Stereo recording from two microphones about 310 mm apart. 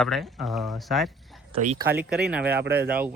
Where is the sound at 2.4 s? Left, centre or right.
Right.